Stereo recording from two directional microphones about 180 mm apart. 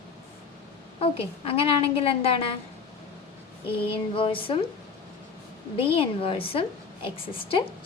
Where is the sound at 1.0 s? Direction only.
30° left (ahead or behind).